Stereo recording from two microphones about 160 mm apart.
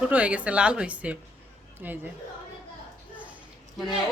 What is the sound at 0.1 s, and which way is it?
A woman's voice, 10° right (ahead or behind).